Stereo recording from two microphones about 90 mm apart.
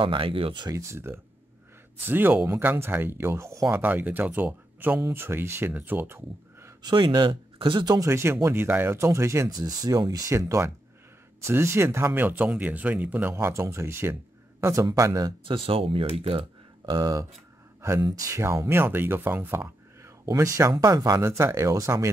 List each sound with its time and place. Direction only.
0.0 s speech: 75° right (ahead or behind)
0.7 s speech: 35° right (ahead or behind)
3.8 s speech: 20° right (ahead or behind)
6.8 s speech: 55° right (ahead or behind)
8.1 s speech: 30° right (ahead or behind)
13.3 s a man's voice: 30° right (ahead or behind)
15.4 s speech: 90° right
16.9 s speech: 45° right (ahead or behind)